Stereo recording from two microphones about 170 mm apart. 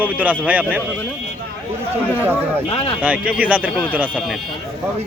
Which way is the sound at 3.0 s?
5° right (ahead or behind).